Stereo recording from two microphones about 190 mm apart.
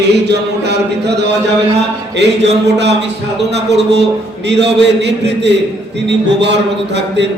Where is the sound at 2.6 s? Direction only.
65° right (ahead or behind).